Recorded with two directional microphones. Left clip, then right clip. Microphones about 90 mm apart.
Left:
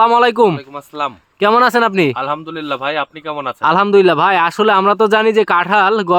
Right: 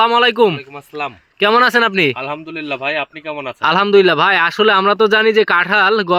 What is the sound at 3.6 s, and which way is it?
A man's voice, 45° left (ahead or behind).